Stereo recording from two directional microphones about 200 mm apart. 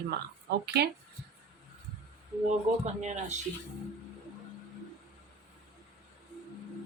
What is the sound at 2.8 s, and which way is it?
Speech, 35° right (ahead or behind).